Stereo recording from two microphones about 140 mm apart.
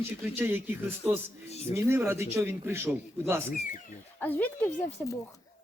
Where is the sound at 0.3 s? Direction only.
15° right (ahead or behind).